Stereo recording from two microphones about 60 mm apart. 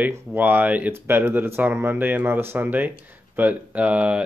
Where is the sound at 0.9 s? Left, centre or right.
Right.